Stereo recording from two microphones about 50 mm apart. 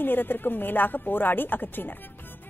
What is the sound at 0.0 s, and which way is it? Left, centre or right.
A woman's voice, left.